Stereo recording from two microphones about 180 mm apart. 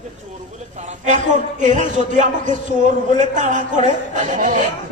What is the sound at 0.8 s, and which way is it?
A man's voice, 45° right (ahead or behind).